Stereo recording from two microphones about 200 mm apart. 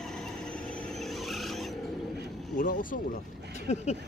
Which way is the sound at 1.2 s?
Centre (ahead or behind).